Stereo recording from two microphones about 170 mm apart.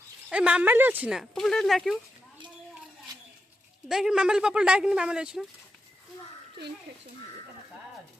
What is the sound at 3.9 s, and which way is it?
Speech, 5° right (ahead or behind).